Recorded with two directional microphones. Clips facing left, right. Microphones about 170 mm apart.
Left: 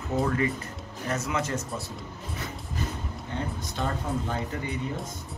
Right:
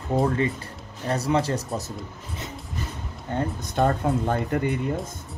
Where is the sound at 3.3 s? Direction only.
50° right (ahead or behind).